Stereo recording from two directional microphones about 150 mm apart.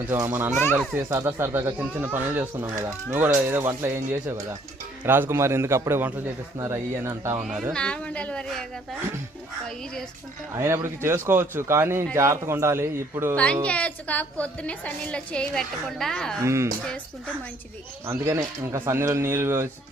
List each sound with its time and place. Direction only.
0.2 s speech: 15° right (ahead or behind)
0.5 s a woman's voice: 15° left (ahead or behind)
0.9 s speech: 20° right (ahead or behind)
7.4 s speech: centre (ahead or behind)
10.6 s speech: 15° right (ahead or behind)
13.3 s a woman's voice: 10° left (ahead or behind)
16.4 s speech: 20° right (ahead or behind)
18.0 s speech: 15° right (ahead or behind)